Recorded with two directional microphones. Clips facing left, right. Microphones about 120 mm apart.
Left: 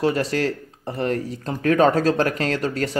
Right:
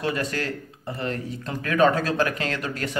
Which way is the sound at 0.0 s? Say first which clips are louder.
Left 6 dB; 30° left (ahead or behind).